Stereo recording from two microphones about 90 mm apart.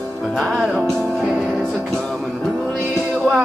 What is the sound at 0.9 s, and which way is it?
Music, 5° left (ahead or behind).